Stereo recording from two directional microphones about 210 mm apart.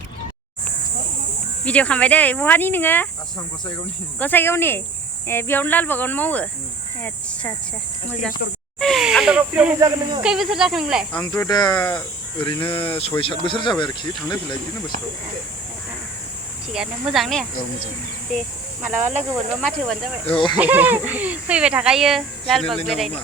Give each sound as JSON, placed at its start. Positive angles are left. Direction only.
{"t": 1.6, "sound": "speech", "side_deg": 5}
{"t": 4.2, "sound": "speech", "side_deg": 10}
{"t": 8.8, "sound": "speech", "side_deg": 0}
{"t": 9.8, "sound": "speech", "side_deg": -20}
{"t": 10.2, "sound": "speech", "side_deg": 0}
{"t": 11.2, "sound": "speech", "side_deg": 20}
{"t": 16.6, "sound": "speech", "side_deg": -5}
{"t": 20.2, "sound": "speech", "side_deg": 25}
{"t": 20.6, "sound": "speech", "side_deg": -10}